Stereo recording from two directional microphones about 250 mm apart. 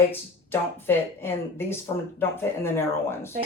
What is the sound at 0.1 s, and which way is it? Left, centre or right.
Speech, centre.